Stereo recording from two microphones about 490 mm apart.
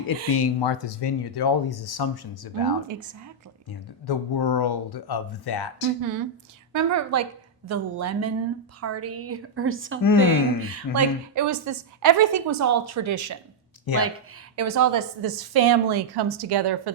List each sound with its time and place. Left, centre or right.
0.3 s speech: left
2.8 s speech: right
4.0 s speech: left
6.0 s a woman's voice: right
14.5 s speech: right